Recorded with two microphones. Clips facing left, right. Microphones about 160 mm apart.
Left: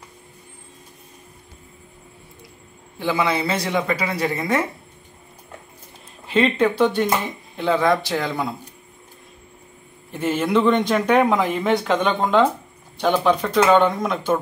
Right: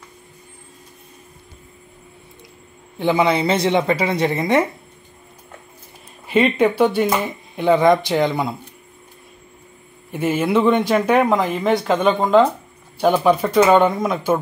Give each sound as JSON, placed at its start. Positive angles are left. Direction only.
{"t": 3.0, "sound": "speech", "side_deg": -20}
{"t": 6.2, "sound": "speech", "side_deg": -10}
{"t": 10.1, "sound": "speech", "side_deg": -10}